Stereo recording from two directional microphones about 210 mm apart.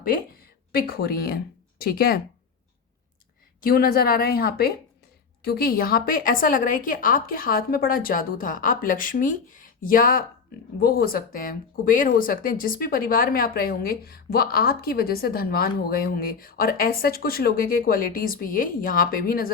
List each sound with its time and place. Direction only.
0.9 s speech: 45° left (ahead or behind)
3.6 s speech: 45° left (ahead or behind)